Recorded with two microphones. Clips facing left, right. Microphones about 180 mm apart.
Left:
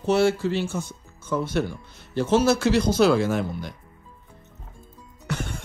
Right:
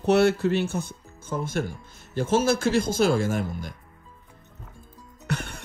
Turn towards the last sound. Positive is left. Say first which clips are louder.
# left 1 dB
turn(degrees=-60)  # may be behind; listen again after turning